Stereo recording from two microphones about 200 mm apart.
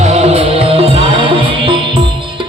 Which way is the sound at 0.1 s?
30° right (ahead or behind).